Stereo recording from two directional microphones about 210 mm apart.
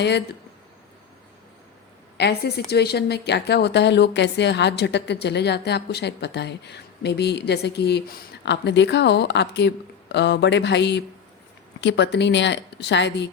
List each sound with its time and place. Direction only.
2.1 s a woman's voice: 50° left (ahead or behind)